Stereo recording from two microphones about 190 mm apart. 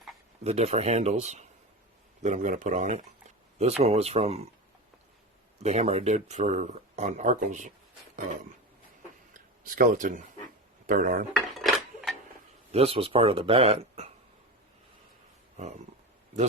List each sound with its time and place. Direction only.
0.4 s speech: 35° right (ahead or behind)
5.5 s speech: 35° right (ahead or behind)
9.3 s a sound: 45° right (ahead or behind)
10.8 s dishes: 45° right (ahead or behind)
11.5 s dishes: centre (ahead or behind)
12.7 s speech: 30° right (ahead or behind)